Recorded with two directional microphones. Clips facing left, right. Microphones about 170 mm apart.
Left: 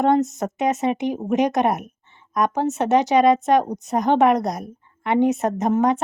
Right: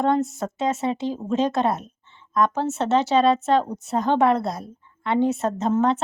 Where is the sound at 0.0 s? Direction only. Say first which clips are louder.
Left 3 dB; 20° left (ahead or behind).